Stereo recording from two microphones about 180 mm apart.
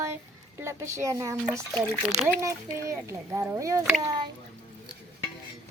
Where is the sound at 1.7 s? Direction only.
10° left (ahead or behind).